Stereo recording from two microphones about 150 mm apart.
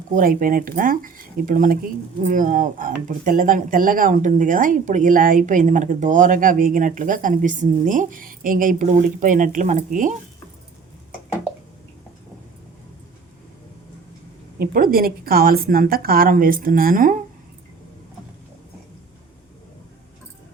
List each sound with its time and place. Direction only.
0.1 s speech: 70° right (ahead or behind)
14.6 s a woman's voice: 80° right; by 17.2 s 65° right (ahead or behind)